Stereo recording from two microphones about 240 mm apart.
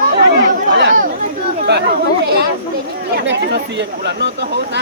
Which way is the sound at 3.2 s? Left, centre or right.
Right.